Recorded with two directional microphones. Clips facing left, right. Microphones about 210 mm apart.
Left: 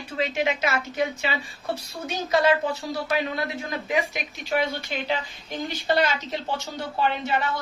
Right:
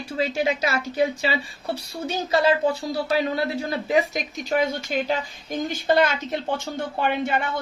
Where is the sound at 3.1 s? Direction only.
35° right (ahead or behind); by 7.4 s 55° right (ahead or behind).